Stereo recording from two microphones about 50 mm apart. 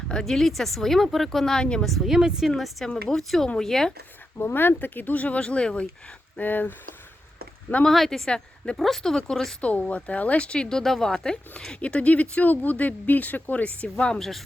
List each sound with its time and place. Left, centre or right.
0.1 s a woman's voice: centre
0.3 s speech: centre
2.6 s speech: centre
2.8 s speech: centre
4.4 s speech: left
6.3 s speech: left
7.9 s speech: centre
8.3 s a woman's voice: centre
8.8 s speech: centre
9.6 s speech: left
14.1 s speech: centre